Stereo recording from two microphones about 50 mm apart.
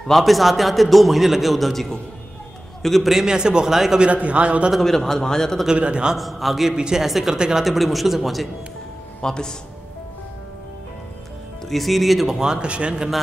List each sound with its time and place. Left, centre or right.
0.0 s a man's voice: centre
4.0 s a man's voice: right
4.7 s a man's voice: centre
5.7 s a man's voice: centre
6.1 s a man's voice: centre
7.6 s a man's voice: centre
9.2 s a man's voice: centre
11.7 s a man's voice: centre
12.4 s a man's voice: centre